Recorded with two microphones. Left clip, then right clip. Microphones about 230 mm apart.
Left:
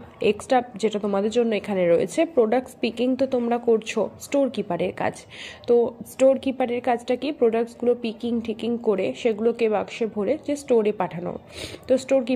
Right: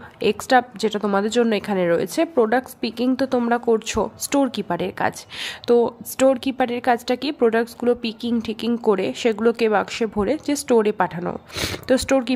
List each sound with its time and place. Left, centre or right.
0.2 s a woman's voice: centre
11.5 s speech: right